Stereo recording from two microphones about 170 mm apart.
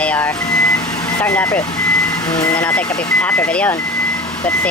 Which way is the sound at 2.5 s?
10° left (ahead or behind).